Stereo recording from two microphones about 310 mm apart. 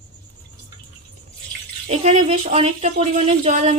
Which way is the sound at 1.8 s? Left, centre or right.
Right.